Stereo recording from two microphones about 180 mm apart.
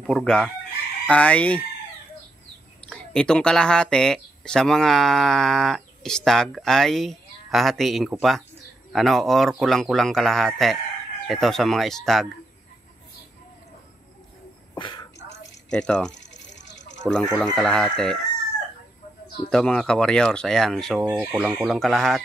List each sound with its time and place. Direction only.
0.0 s chicken: 5° left (ahead or behind)
1.0 s fowl: 5° left (ahead or behind)
2.9 s speech: 5° left (ahead or behind)
14.8 s a sound: 25° left (ahead or behind)
15.7 s speech: 5° left (ahead or behind)
16.1 s a sound: 80° left
17.0 s speech: 5° left (ahead or behind)
19.5 s speech: 5° left (ahead or behind)